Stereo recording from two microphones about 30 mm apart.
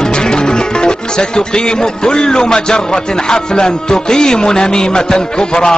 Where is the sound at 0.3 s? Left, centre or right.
Left.